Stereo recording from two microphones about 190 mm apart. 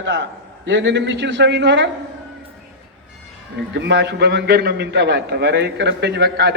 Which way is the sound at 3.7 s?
65° right (ahead or behind).